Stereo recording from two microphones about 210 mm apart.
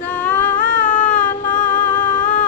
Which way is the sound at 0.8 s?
10° left (ahead or behind).